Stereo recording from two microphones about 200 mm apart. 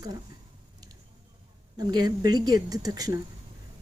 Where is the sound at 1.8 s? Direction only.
20° right (ahead or behind).